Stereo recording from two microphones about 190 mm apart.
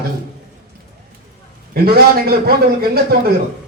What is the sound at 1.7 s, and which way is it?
Speech, 50° right (ahead or behind).